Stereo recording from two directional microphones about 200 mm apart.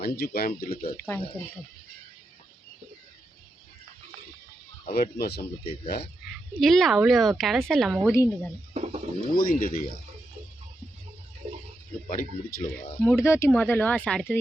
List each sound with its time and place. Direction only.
0.0 s speech: 50° left (ahead or behind)
0.9 s speech: 10° left (ahead or behind)
4.9 s speech: 50° left (ahead or behind)
6.6 s a woman's voice: centre (ahead or behind)
8.0 s speech: 15° left (ahead or behind)
8.7 s bird: 30° right (ahead or behind)
9.3 s speech: 45° left (ahead or behind)
12.0 s speech: 45° left (ahead or behind)
13.0 s speech: 10° left (ahead or behind)